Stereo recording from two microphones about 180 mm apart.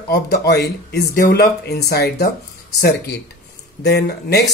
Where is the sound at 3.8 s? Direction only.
65° left (ahead or behind).